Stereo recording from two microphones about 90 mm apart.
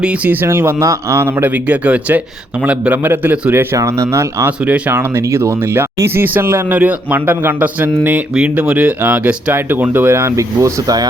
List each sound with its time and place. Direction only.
0.0 s speech: 15° right (ahead or behind)
0.4 s speech: 30° right (ahead or behind)
3.8 s speech: 35° right (ahead or behind)
4.6 s speech: 20° right (ahead or behind); by 11.0 s 40° right (ahead or behind)